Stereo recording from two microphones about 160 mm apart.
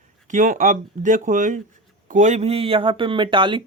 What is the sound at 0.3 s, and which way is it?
Speech, 50° right (ahead or behind).